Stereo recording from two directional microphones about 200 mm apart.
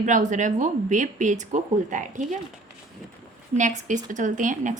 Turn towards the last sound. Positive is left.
turn(degrees=-40)  # may be behind; listen again after turning